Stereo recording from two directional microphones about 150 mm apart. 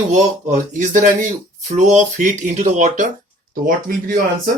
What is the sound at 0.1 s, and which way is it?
Speech, 55° right (ahead or behind).